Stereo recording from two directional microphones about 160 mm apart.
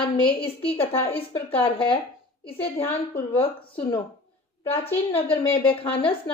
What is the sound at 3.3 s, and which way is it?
A woman's voice, 35° left (ahead or behind).